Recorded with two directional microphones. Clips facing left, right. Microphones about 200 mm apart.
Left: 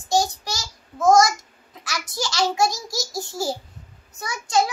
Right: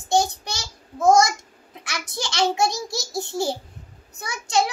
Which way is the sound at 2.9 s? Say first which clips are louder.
Right 1 dB; 60° right (ahead or behind).